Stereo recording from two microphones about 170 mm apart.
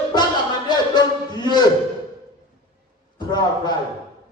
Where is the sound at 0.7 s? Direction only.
25° left (ahead or behind).